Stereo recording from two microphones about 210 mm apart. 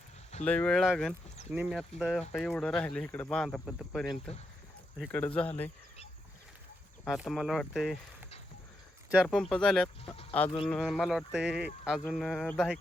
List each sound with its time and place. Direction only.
0.4 s speech: 5° left (ahead or behind)
4.0 s speech: 20° left (ahead or behind)
4.9 s speech: 5° left (ahead or behind)
7.0 s speech: centre (ahead or behind)
9.2 s speech: 5° left (ahead or behind)